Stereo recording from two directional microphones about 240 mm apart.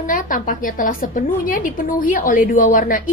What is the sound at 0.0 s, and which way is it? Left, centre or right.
A woman's voice, left.